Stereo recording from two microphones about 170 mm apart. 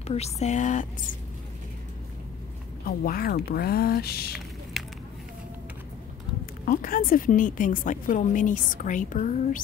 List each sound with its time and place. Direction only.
0.0 s a woman's voice: 40° left (ahead or behind)
2.8 s speech: 60° left (ahead or behind)
4.7 s a sound: centre (ahead or behind)
6.6 s a woman's voice: 55° left (ahead or behind)